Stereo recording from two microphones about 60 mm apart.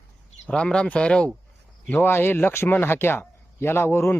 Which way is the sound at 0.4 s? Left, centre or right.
Centre.